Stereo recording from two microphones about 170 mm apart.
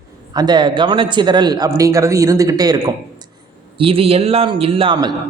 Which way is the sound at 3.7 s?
35° right (ahead or behind).